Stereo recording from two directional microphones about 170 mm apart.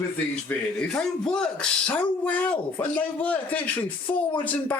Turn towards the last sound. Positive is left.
turn(degrees=10)  # may be behind; listen again after turning